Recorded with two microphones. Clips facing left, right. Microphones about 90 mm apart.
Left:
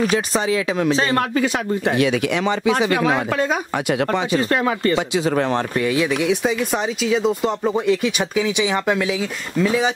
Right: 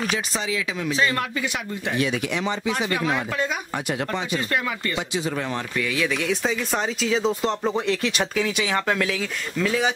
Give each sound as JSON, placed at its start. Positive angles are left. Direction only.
{"t": 0.1, "sound": "speech", "side_deg": 50}
{"t": 2.0, "sound": "speech", "side_deg": 80}
{"t": 3.7, "sound": "speech", "side_deg": 90}
{"t": 4.4, "sound": "speech", "side_deg": 40}
{"t": 5.3, "sound": "speech", "side_deg": 65}
{"t": 5.8, "sound": "speech", "side_deg": 25}